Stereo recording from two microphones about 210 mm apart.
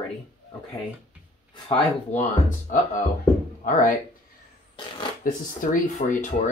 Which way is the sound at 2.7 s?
40° left (ahead or behind).